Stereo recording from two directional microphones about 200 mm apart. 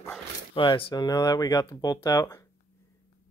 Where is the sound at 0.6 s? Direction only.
25° left (ahead or behind).